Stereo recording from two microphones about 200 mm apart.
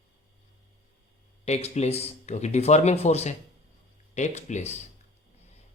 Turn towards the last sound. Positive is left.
turn(degrees=35)  # may be behind; listen again after turning